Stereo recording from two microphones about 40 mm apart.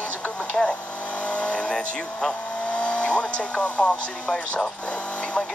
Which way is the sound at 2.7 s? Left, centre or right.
Left.